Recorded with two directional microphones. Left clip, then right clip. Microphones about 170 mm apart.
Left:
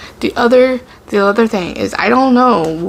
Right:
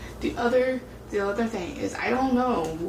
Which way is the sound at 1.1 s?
35° left (ahead or behind).